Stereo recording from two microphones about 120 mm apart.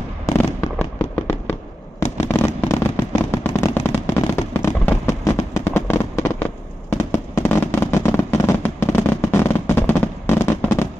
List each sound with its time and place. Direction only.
0.6 s fireworks: 15° left (ahead or behind)